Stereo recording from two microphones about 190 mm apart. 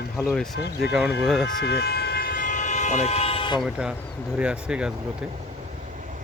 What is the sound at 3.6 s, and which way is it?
Speech, 5° right (ahead or behind).